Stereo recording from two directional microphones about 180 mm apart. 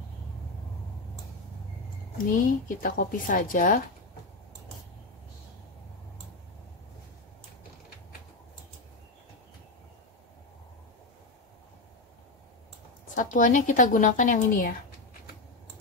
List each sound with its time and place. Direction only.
2.1 s a woman's voice: 50° left (ahead or behind)
13.1 s a woman's voice: 45° left (ahead or behind)